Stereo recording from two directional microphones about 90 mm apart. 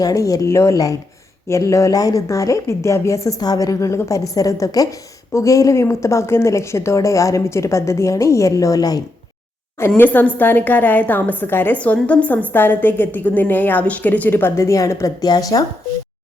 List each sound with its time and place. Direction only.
0.0 s speech: 40° left (ahead or behind)
10.0 s a woman's voice: 20° left (ahead or behind)
14.5 s speech: 35° left (ahead or behind)
15.2 s speech: 45° left (ahead or behind)